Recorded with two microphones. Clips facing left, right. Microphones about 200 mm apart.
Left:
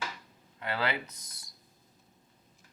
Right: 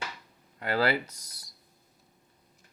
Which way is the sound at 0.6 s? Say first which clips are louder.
Right 6 dB; 40° right (ahead or behind).